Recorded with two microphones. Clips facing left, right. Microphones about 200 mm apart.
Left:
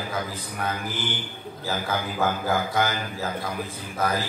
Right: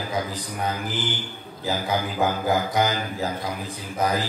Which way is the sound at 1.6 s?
15° right (ahead or behind).